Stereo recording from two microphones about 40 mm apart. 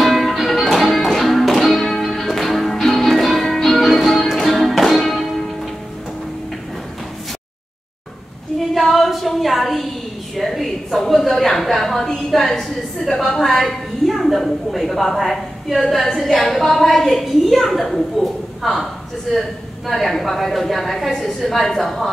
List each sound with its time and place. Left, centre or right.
0.0 s music: centre
8.5 s a sound: centre
21.4 s a woman's voice: centre